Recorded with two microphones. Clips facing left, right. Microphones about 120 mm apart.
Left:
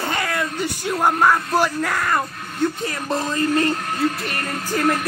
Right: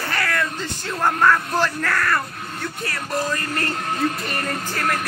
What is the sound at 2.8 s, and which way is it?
Music, 20° left (ahead or behind).